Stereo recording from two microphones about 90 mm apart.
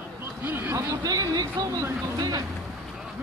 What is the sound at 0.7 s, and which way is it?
Speech, 40° right (ahead or behind).